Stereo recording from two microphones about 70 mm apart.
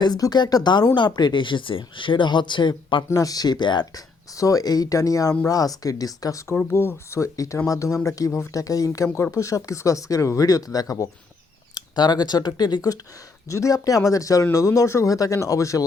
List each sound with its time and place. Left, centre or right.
0.0 s speech: left
1.5 s speech: left
2.2 s speech: left
3.1 s speech: left
4.4 s speech: left
6.7 s speech: left
7.2 s speech: left
11.7 s speech: left
13.5 s speech: left